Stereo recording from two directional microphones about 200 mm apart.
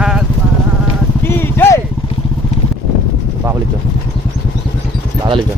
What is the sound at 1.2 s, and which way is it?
Speech, 10° left (ahead or behind).